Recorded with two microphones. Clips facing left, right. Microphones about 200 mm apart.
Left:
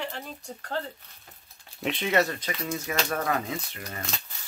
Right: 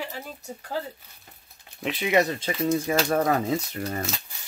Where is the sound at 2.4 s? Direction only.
30° right (ahead or behind).